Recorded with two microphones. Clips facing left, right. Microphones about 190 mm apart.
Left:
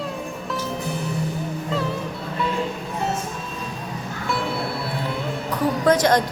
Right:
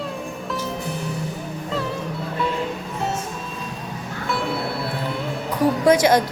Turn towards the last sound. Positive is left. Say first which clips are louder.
# right 2 dB
turn(degrees=-10)  # may be behind; listen again after turning